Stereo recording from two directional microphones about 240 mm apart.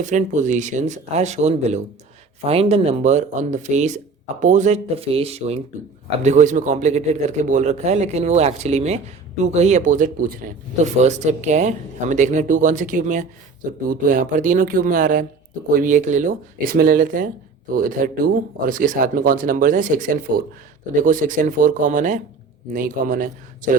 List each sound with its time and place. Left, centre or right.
0.0 s speech: right